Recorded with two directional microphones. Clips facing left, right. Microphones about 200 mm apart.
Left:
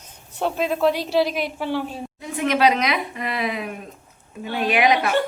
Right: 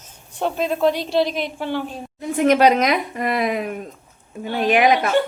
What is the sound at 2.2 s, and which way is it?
Speech, 45° right (ahead or behind).